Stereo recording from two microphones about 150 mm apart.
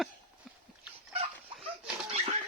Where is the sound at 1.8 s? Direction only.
40° right (ahead or behind).